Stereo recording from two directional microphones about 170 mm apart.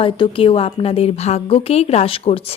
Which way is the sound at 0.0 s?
30° left (ahead or behind).